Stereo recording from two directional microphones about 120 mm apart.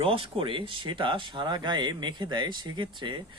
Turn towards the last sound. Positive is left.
turn(degrees=-40)  # may be behind; listen again after turning